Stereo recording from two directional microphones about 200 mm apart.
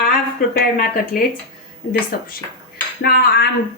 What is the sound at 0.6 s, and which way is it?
A woman's voice, 50° left (ahead or behind).